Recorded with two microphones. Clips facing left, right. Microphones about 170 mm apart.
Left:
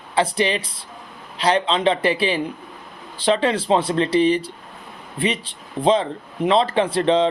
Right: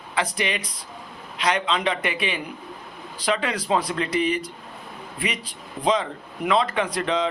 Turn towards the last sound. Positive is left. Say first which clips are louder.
# left 6 dB
turn(degrees=30)  # may be behind; listen again after turning